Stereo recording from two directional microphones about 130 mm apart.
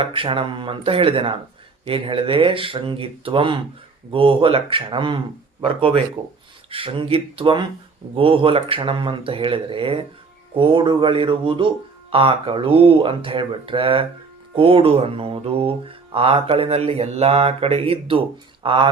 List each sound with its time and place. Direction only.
0.0 s speech: 45° right (ahead or behind)